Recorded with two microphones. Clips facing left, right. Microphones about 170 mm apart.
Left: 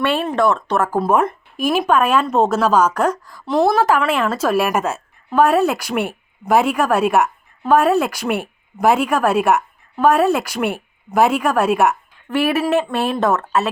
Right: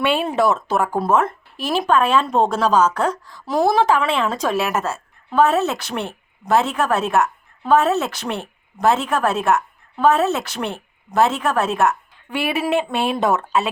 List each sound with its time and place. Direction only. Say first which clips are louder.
0.0 s speech: left 1 dB; centre (ahead or behind)
1.2 s a sound: left 4 dB; 15° left (ahead or behind)
1.7 s speech: left 1 dB; 5° left (ahead or behind)
12.7 s speech: left 2 dB; centre (ahead or behind)